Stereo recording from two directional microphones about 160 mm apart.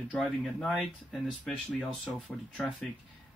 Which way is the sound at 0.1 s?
5° left (ahead or behind).